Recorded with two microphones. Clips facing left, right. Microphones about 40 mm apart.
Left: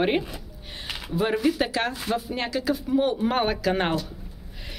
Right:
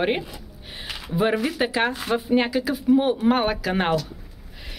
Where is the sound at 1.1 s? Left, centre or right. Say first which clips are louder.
Right 1 dB; centre.